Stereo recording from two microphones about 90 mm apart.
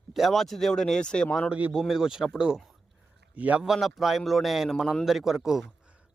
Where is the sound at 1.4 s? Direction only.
15° right (ahead or behind).